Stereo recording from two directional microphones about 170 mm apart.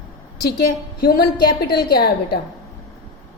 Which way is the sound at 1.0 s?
60° left (ahead or behind).